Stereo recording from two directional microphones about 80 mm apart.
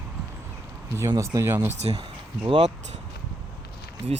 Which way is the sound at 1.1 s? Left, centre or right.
Right.